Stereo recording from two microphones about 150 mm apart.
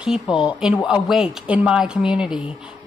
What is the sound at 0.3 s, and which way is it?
Speech, 35° left (ahead or behind).